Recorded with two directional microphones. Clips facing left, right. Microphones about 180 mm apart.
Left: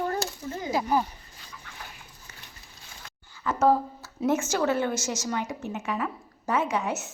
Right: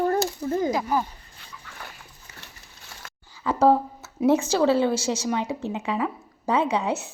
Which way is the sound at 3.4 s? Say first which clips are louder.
Right 3 dB; 30° right (ahead or behind).